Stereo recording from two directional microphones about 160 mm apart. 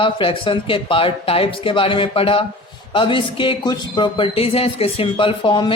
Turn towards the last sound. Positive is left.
turn(degrees=30)  # may be behind; listen again after turning